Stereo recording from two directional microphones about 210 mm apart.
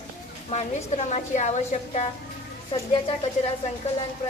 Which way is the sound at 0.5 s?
30° left (ahead or behind).